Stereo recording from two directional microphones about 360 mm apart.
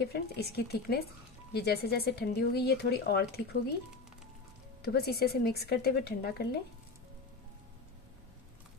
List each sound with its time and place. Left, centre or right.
0.0 s speech: left
4.8 s speech: left